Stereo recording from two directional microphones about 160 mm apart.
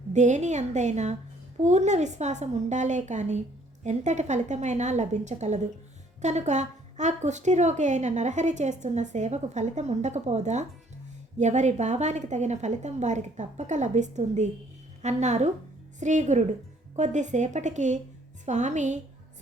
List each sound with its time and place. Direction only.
0.1 s a woman's voice: 45° right (ahead or behind)